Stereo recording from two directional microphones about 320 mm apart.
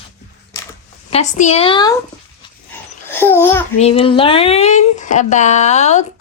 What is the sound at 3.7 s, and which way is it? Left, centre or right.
A woman's voice, centre.